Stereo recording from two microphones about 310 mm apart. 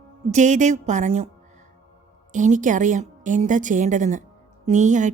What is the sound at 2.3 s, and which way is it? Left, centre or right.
A woman's voice, right.